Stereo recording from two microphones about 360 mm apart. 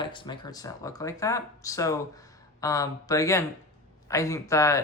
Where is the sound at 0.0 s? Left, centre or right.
Centre.